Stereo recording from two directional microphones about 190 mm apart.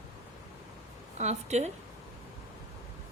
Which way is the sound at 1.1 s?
35° right (ahead or behind).